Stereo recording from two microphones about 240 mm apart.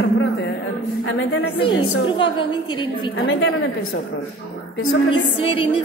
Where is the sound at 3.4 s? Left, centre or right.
Left.